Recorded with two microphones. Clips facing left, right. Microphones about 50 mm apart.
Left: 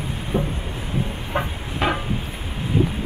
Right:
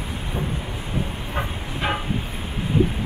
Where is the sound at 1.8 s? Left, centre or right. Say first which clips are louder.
Left 3 dB; left.